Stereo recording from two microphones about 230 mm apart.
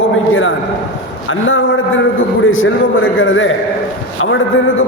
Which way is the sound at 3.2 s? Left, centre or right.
Left.